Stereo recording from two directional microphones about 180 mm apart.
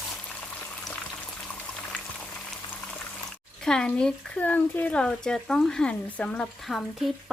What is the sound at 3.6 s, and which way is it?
Speech, 5° left (ahead or behind).